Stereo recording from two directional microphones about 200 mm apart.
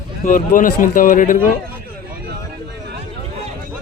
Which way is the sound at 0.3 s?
40° left (ahead or behind).